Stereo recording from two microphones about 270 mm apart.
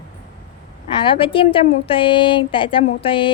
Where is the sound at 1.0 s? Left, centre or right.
Centre.